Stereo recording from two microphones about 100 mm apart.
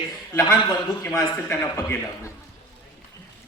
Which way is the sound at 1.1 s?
20° left (ahead or behind).